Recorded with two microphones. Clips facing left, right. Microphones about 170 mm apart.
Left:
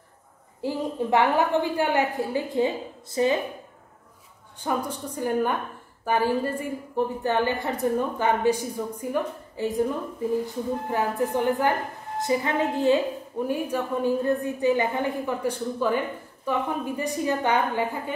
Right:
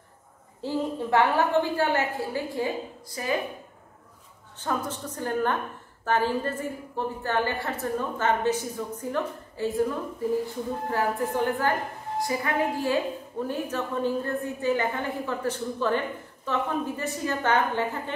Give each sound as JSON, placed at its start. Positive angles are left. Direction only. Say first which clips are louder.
{"t": 0.6, "sound": "a woman's voice", "louder": "left 1 dB", "side_deg": 15}
{"t": 4.6, "sound": "a woman's voice", "louder": "left 2 dB", "side_deg": 10}
{"t": 10.9, "sound": "a woman's voice", "louder": "even", "side_deg": 20}